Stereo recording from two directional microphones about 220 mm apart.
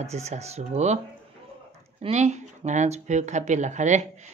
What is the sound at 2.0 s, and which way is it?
Speech, 30° right (ahead or behind).